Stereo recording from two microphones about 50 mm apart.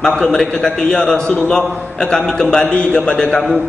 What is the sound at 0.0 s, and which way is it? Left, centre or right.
A man's voice, centre.